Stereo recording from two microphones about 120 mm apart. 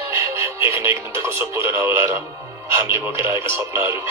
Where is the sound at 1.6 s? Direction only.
20° right (ahead or behind).